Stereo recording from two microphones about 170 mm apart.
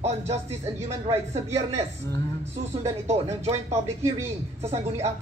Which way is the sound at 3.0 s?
40° right (ahead or behind).